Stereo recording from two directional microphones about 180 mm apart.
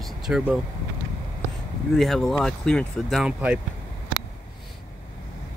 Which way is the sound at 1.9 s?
Centre (ahead or behind).